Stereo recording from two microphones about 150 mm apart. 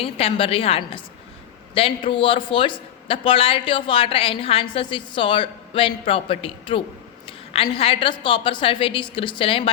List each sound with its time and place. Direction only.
0.0 s a woman's voice: 40° left (ahead or behind)